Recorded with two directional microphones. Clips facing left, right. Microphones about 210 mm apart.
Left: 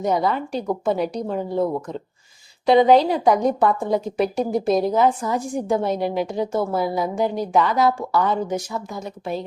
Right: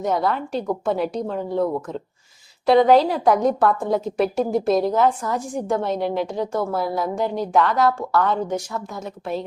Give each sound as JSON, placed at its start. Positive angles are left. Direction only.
{"t": 0.0, "sound": "a woman's voice", "side_deg": 0}